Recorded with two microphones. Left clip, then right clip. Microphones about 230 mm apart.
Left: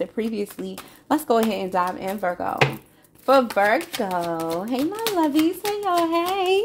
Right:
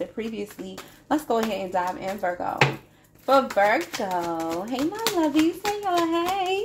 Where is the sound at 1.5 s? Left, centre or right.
Left.